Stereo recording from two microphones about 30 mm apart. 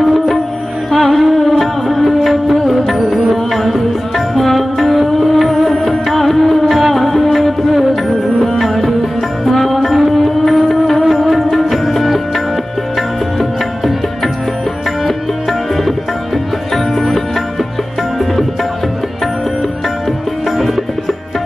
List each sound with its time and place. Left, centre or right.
0.9 s music: centre
10.4 s music: centre
11.0 s music: centre
13.4 s music: centre
16.7 s music: centre